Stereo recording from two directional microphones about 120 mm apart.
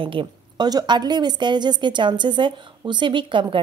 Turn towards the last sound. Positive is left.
turn(degrees=-45)  # may be behind; listen again after turning